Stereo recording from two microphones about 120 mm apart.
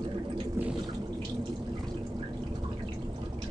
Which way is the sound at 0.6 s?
20° right (ahead or behind).